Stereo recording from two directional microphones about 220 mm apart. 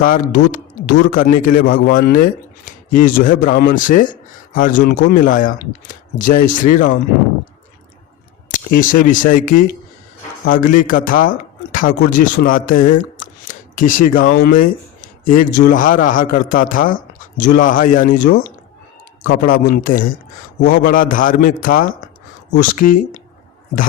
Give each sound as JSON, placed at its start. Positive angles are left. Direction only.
{"t": 0.0, "sound": "speech", "side_deg": 40}
{"t": 8.4, "sound": "speech", "side_deg": 40}